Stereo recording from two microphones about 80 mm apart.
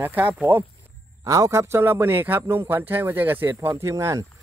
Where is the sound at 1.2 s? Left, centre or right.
Right.